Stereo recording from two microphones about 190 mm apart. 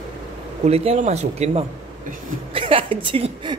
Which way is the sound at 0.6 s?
35° right (ahead or behind).